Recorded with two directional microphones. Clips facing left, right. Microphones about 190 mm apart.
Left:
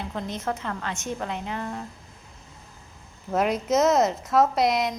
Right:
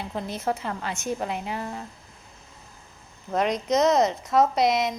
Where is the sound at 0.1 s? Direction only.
10° right (ahead or behind).